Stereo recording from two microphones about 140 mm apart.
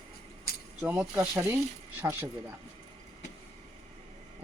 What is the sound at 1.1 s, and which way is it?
Speech, 15° right (ahead or behind).